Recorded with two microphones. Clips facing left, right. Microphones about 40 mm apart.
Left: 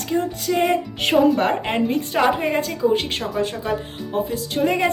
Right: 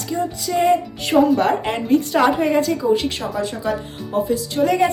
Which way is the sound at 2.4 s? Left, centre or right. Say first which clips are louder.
Right 3 dB; left.